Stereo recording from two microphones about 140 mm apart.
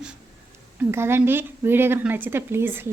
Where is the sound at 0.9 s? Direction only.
15° right (ahead or behind).